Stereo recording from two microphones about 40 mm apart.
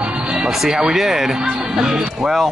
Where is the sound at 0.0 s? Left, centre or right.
Right.